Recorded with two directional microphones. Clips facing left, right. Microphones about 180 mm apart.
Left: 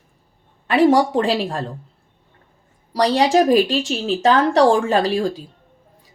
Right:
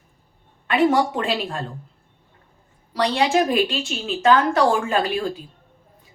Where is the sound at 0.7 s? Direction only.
35° left (ahead or behind).